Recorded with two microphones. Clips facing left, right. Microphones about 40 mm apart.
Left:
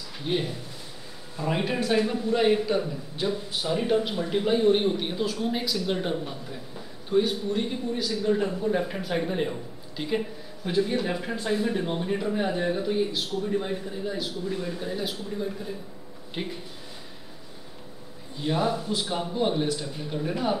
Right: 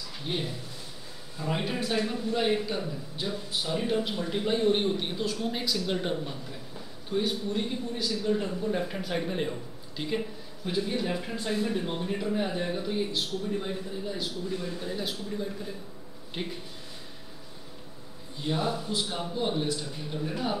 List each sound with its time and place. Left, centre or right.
0.3 s a man's voice: centre
1.3 s a man's voice: centre
1.9 s a man's voice: centre
18.4 s a man's voice: centre